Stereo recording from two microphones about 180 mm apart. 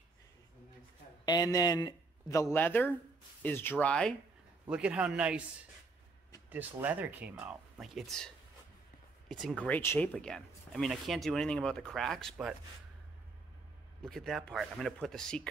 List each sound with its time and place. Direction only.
1.2 s speech: 20° left (ahead or behind); by 4.1 s 5° left (ahead or behind)
4.6 s speech: 5° right (ahead or behind)
6.5 s speech: 10° right (ahead or behind)
9.3 s speech: 5° left (ahead or behind)
14.0 s speech: centre (ahead or behind)